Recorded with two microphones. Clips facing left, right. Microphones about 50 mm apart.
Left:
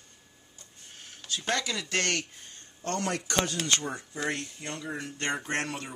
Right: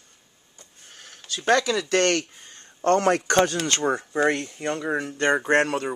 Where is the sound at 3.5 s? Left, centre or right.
Right.